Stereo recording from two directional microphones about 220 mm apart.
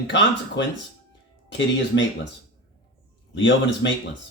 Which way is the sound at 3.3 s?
55° left (ahead or behind).